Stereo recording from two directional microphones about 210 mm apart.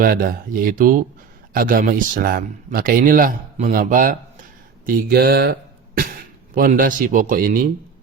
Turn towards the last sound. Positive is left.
turn(degrees=-40)  # may be behind; listen again after turning